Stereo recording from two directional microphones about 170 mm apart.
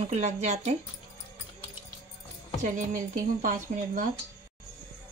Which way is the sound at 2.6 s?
50° right (ahead or behind).